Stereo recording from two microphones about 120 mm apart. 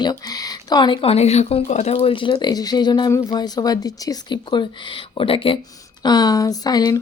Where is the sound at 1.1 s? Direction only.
65° left (ahead or behind); by 2.3 s 45° left (ahead or behind).